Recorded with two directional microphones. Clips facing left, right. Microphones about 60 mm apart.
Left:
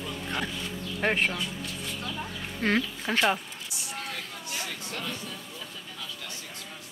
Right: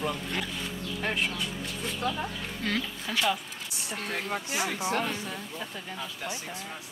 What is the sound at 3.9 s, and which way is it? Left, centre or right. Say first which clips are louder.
Speech: right 3 dB; right.